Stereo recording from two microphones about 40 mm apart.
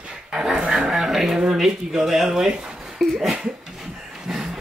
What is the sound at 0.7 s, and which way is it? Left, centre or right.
Speech, centre.